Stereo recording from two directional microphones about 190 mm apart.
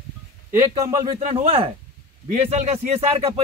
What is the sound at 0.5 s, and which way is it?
Speech, 15° right (ahead or behind).